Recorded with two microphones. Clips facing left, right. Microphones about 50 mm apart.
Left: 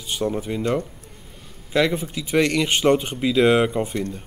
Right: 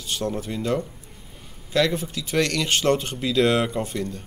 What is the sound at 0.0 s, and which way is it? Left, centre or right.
Speech, centre.